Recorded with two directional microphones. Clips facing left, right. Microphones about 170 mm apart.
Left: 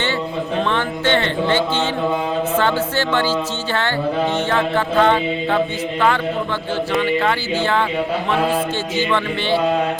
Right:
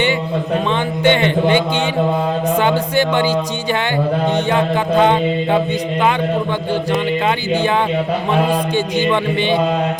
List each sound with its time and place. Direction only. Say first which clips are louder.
0.7 s a woman's voice: right 5 dB; 15° right (ahead or behind)
7.3 s a woman's voice: right 3 dB; 15° right (ahead or behind)